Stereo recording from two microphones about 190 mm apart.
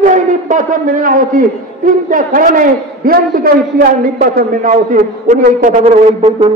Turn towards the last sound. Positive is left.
turn(degrees=-35)  # may be behind; listen again after turning